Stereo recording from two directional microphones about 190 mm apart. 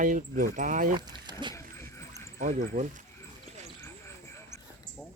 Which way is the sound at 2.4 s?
40° right (ahead or behind).